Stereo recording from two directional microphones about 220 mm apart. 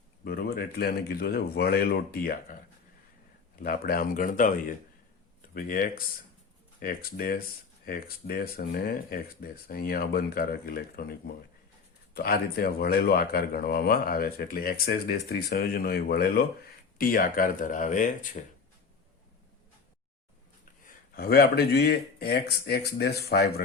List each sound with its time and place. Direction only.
0.3 s speech: 45° left (ahead or behind)
3.6 s speech: 40° left (ahead or behind)
21.2 s speech: 45° left (ahead or behind)